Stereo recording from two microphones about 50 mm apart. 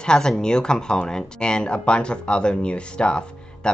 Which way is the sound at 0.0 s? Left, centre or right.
Centre.